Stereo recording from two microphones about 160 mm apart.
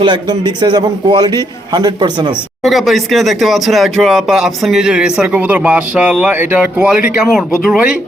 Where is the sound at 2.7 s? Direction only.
Centre (ahead or behind).